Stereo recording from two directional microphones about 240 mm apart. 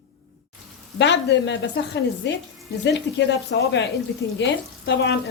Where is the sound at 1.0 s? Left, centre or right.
Left.